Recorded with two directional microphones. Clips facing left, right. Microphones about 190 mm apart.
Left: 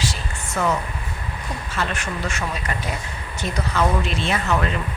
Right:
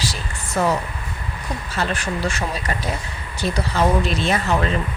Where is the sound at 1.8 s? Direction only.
35° right (ahead or behind).